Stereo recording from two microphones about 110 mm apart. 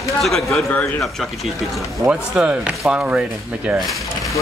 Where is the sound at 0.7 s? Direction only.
15° left (ahead or behind).